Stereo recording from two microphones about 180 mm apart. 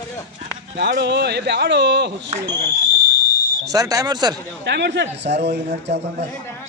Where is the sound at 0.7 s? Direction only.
70° right (ahead or behind).